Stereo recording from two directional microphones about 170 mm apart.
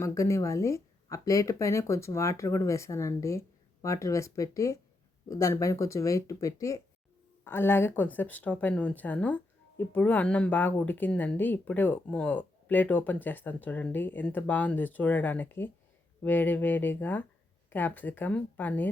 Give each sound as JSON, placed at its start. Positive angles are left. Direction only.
{"t": 0.0, "sound": "speech", "side_deg": 20}